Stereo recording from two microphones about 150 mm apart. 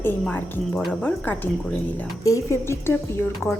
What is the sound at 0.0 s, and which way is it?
A woman's voice, 15° left (ahead or behind).